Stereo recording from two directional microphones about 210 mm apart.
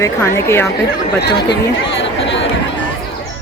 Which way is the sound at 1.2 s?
55° left (ahead or behind).